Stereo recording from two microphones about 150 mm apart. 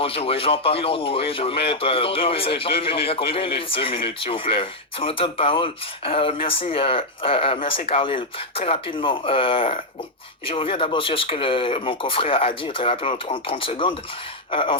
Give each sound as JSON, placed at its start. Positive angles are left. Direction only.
{"t": 0.0, "sound": "a man's voice", "side_deg": 40}